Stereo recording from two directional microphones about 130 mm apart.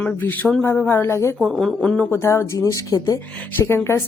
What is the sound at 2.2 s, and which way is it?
Speech, 20° left (ahead or behind).